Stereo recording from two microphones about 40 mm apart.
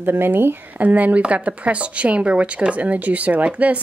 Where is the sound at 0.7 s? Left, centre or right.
Right.